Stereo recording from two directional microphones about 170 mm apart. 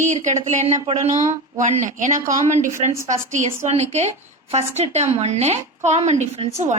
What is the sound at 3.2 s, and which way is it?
A woman's voice, 45° right (ahead or behind).